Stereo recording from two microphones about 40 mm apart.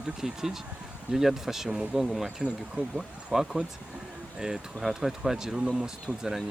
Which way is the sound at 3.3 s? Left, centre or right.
Centre.